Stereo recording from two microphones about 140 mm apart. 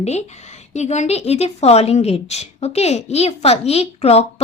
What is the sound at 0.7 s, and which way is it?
A woman's voice, 55° left (ahead or behind).